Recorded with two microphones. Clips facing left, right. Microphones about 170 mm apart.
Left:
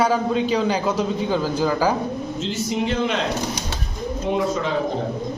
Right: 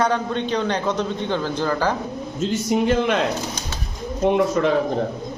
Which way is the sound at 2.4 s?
50° right (ahead or behind).